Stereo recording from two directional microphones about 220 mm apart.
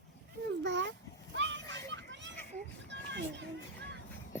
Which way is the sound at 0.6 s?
50° right (ahead or behind).